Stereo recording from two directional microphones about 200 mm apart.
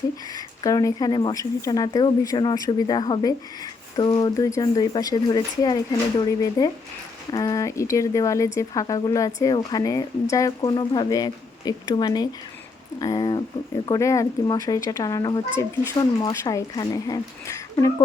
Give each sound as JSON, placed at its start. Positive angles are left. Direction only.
{"t": 0.3, "sound": "speech", "side_deg": 20}